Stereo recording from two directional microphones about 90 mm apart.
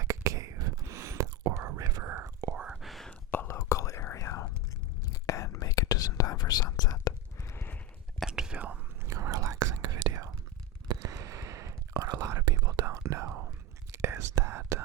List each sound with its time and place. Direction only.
0.0 s whispering: 35° right (ahead or behind)
2.0 s whispering: 25° right (ahead or behind)
2.6 s whispering: centre (ahead or behind)
3.4 s whispering: 35° left (ahead or behind)
8.3 s whispering: 10° right (ahead or behind)
9.0 s whispering: 35° right (ahead or behind)
12.5 s whispering: 45° right (ahead or behind)